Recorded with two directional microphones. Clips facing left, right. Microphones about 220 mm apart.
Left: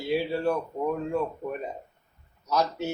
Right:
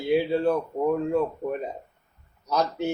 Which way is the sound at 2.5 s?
15° right (ahead or behind).